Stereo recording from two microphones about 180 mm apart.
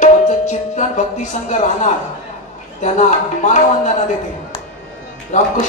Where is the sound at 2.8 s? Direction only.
45° left (ahead or behind).